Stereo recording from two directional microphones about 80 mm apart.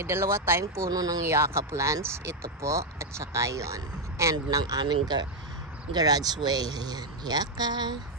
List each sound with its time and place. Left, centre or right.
0.0 s speech: right
0.8 s speech: right
1.2 s speech: right
4.9 s speech: right